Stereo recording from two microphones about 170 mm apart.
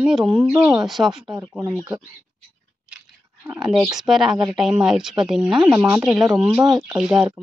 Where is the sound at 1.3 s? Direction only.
15° right (ahead or behind).